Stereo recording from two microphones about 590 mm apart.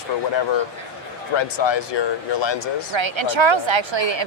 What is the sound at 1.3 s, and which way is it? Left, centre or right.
Speech, left.